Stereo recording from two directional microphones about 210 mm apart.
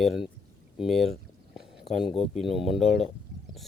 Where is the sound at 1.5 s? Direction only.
Centre (ahead or behind).